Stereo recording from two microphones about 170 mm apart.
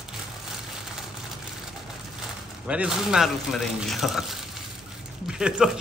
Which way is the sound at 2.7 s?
5° right (ahead or behind).